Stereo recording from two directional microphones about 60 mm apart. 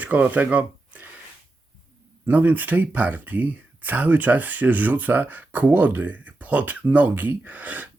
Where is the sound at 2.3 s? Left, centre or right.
Right.